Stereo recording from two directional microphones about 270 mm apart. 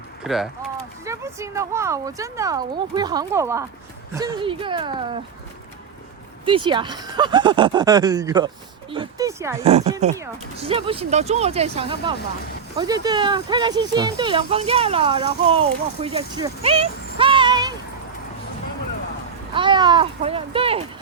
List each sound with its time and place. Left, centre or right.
0.3 s speech: centre
6.4 s speech: centre
9.6 s speech: right
19.5 s speech: centre